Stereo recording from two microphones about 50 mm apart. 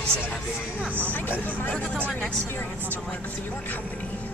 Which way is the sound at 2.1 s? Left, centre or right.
Centre.